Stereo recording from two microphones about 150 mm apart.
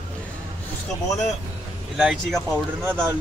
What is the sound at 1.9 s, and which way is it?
Speech, centre (ahead or behind).